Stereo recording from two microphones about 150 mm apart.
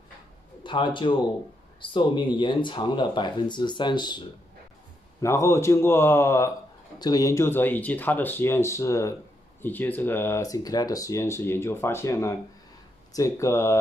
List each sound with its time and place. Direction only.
0.7 s speech: 35° left (ahead or behind)
5.2 s speech: 20° left (ahead or behind)